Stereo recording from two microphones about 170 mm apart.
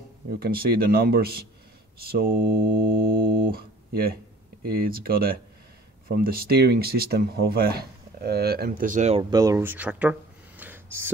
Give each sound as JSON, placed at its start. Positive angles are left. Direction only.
{"t": 0.4, "sound": "speech", "side_deg": -60}
{"t": 9.3, "sound": "speech", "side_deg": -20}
{"t": 10.6, "sound": "a sound", "side_deg": -10}